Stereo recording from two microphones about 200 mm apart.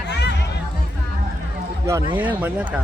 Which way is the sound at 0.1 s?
60° left (ahead or behind).